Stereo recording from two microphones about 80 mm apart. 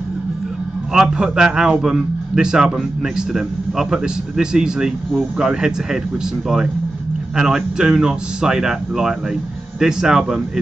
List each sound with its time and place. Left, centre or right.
0.9 s a man's voice: centre
7.3 s a man's voice: centre